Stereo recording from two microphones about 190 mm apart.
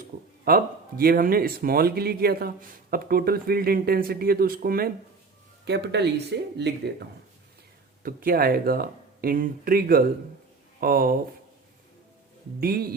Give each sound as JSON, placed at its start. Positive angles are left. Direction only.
{"t": 0.4, "sound": "speech", "side_deg": -50}
{"t": 5.6, "sound": "speech", "side_deg": -65}
{"t": 8.0, "sound": "speech", "side_deg": -50}
{"t": 12.5, "sound": "speech", "side_deg": -50}